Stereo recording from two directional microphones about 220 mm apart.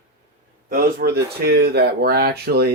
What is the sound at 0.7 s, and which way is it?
Speech, 40° right (ahead or behind).